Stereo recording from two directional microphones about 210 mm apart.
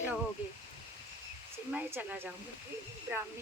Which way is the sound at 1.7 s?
10° right (ahead or behind).